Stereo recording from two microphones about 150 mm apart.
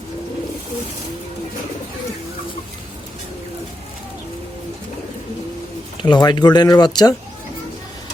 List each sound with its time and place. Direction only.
6.0 s speech: 30° left (ahead or behind)